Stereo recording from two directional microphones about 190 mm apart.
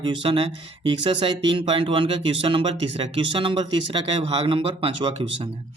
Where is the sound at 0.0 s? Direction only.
25° right (ahead or behind).